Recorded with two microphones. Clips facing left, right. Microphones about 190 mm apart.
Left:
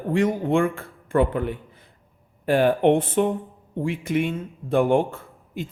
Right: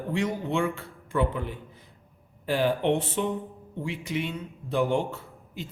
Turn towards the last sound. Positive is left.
turn(degrees=50)  # may be behind; listen again after turning